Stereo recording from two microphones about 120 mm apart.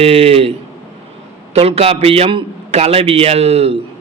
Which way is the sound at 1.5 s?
55° right (ahead or behind).